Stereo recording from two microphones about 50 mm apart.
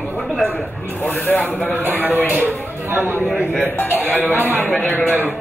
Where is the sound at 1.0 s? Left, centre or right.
Left.